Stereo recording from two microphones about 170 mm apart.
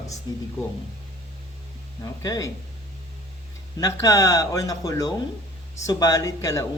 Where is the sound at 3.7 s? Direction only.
20° left (ahead or behind).